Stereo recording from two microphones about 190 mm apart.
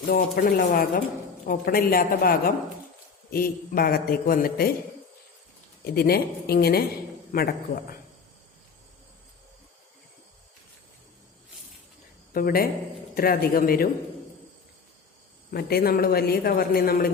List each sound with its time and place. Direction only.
0.1 s a man's voice: 50° left (ahead or behind)
5.8 s a man's voice: 55° left (ahead or behind)
12.3 s a man's voice: 50° left (ahead or behind)
15.5 s a man's voice: 55° left (ahead or behind)